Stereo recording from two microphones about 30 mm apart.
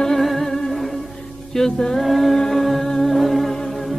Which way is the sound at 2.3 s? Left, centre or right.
Centre.